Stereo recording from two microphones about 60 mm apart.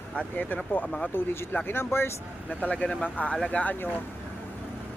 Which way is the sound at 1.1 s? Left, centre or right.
Left.